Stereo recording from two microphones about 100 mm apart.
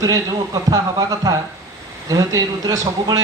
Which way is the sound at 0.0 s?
40° right (ahead or behind).